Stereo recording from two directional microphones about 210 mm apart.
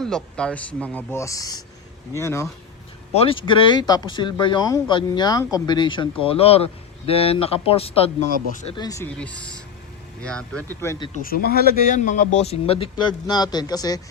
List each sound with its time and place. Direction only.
0.0 s speech: 5° left (ahead or behind)
3.1 s speech: 30° left (ahead or behind); by 11.1 s 10° left (ahead or behind)
11.1 s speech: 45° left (ahead or behind); by 14.0 s 20° left (ahead or behind)